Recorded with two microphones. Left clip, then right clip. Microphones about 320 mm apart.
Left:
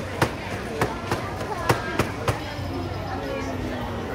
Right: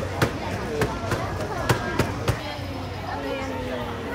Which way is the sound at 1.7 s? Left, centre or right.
Centre.